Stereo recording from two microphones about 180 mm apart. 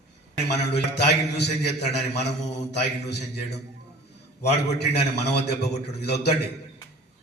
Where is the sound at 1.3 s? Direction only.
65° left (ahead or behind).